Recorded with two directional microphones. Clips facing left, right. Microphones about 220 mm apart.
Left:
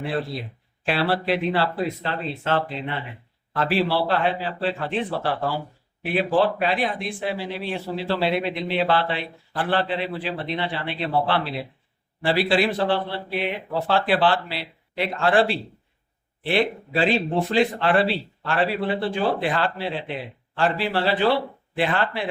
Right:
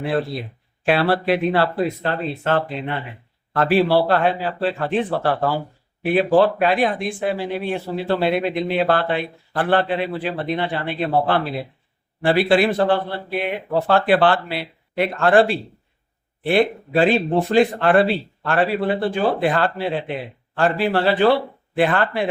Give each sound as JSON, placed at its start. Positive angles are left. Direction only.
{"t": 0.0, "sound": "speech", "side_deg": -55}